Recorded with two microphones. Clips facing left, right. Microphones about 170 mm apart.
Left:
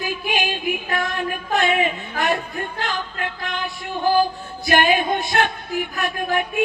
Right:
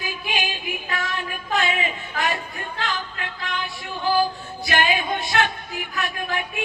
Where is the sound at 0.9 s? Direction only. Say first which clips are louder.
Left 5 dB; 50° left (ahead or behind).